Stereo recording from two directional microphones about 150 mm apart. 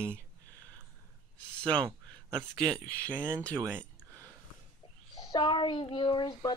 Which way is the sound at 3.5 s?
15° right (ahead or behind).